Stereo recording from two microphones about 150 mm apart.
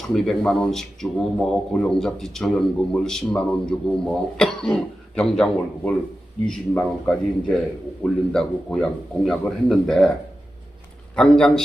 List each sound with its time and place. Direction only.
0.1 s a man's voice: 5° left (ahead or behind)
11.1 s a man's voice: 5° left (ahead or behind)